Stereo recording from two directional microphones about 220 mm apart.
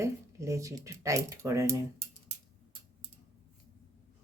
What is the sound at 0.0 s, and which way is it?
Speech, 15° right (ahead or behind).